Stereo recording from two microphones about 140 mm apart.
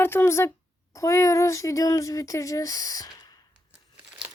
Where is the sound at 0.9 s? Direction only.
20° left (ahead or behind).